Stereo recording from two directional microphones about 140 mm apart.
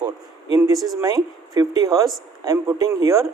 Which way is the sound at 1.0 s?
25° right (ahead or behind).